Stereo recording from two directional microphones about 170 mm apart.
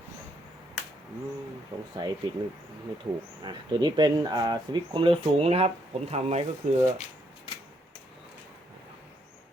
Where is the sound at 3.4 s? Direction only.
25° right (ahead or behind); by 6.8 s 45° right (ahead or behind).